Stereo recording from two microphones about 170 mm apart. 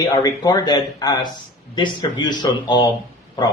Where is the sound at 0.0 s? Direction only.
25° left (ahead or behind).